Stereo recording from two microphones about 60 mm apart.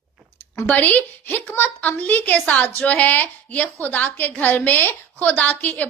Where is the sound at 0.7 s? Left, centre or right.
Left.